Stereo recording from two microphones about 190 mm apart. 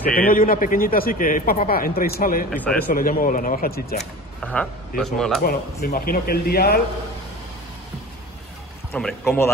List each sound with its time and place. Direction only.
0.1 s a man's voice: 50° left (ahead or behind)
2.5 s speech: 10° left (ahead or behind)
2.9 s a man's voice: 50° left (ahead or behind)
4.0 s speech: 5° left (ahead or behind)
5.4 s a man's voice: 55° left (ahead or behind)
8.9 s speech: 5° left (ahead or behind)